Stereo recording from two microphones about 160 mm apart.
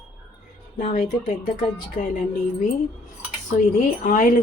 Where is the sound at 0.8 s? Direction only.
50° left (ahead or behind).